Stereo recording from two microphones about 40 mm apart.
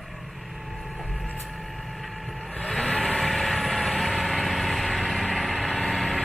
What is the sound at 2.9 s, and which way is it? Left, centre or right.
Vehicle, left.